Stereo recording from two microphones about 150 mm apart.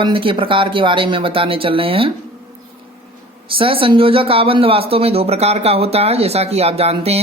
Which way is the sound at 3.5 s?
35° right (ahead or behind).